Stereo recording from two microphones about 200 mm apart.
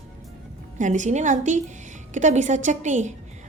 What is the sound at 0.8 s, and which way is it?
A woman's voice, 40° right (ahead or behind).